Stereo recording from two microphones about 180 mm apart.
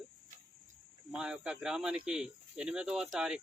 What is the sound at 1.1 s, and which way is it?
Speech, 5° right (ahead or behind).